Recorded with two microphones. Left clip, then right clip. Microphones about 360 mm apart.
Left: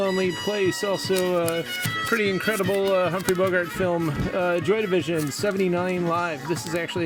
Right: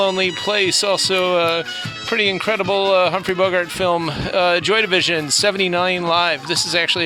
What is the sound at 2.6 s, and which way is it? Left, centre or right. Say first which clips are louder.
Speech: right 7 dB; right.